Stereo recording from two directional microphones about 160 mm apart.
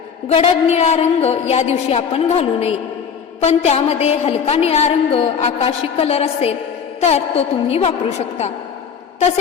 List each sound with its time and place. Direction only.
0.3 s a woman's voice: 40° left (ahead or behind)